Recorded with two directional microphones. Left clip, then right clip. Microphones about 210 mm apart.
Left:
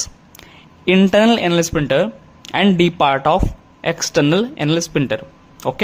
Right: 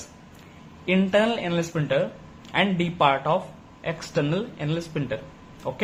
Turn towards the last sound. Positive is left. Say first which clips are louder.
# left 9 dB
turn(degrees=50)  # may be behind; listen again after turning